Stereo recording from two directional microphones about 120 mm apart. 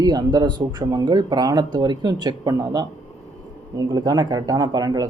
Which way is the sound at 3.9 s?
30° right (ahead or behind).